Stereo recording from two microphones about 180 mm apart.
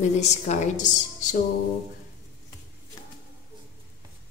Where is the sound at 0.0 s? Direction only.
40° left (ahead or behind).